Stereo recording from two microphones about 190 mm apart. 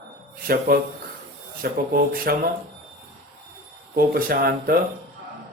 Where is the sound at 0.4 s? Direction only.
50° right (ahead or behind).